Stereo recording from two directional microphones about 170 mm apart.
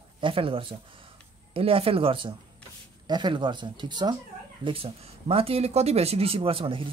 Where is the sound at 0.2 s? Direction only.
30° right (ahead or behind).